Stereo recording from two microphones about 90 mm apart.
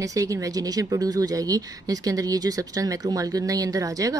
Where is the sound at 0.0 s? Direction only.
40° right (ahead or behind).